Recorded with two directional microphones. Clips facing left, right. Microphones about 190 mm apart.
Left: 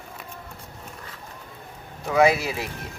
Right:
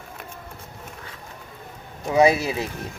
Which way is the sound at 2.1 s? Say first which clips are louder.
Right 2 dB; 25° right (ahead or behind).